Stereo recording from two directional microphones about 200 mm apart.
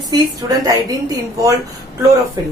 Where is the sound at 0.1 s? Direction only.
20° right (ahead or behind).